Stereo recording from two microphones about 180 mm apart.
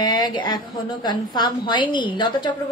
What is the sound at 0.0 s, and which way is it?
A woman's voice, 25° left (ahead or behind).